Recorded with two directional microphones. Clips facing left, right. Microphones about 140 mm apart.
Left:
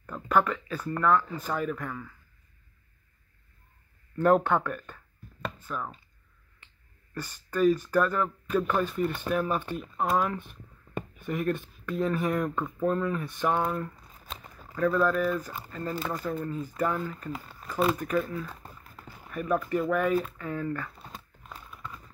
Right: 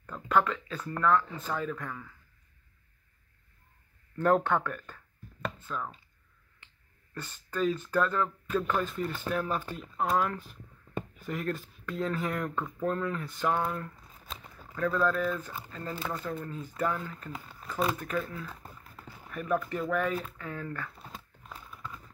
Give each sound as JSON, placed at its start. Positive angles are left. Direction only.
{"t": 0.0, "sound": "speech", "side_deg": 10}
{"t": 4.2, "sound": "speech", "side_deg": 15}
{"t": 7.2, "sound": "speech", "side_deg": 10}
{"t": 14.8, "sound": "speech", "side_deg": 10}
{"t": 19.5, "sound": "speech", "side_deg": 10}